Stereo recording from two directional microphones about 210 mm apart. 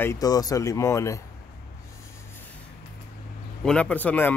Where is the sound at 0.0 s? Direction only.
15° left (ahead or behind).